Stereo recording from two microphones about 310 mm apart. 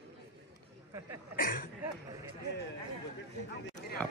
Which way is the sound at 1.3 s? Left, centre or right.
Left.